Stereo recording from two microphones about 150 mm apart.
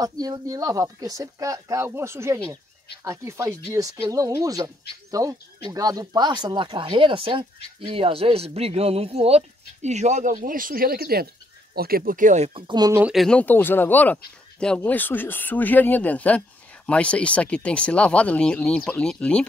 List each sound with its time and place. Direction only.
0.0 s speech: 25° right (ahead or behind); by 12.4 s 60° right (ahead or behind)
12.5 s speech: 30° right (ahead or behind)
13.0 s speech: centre (ahead or behind)